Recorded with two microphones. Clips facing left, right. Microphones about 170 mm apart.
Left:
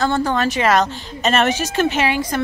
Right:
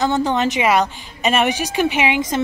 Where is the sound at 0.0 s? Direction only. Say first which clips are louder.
Right 1 dB; 20° right (ahead or behind).